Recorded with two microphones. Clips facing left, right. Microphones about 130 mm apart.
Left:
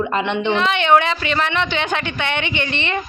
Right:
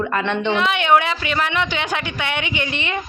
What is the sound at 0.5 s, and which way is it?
A woman's voice, 10° right (ahead or behind).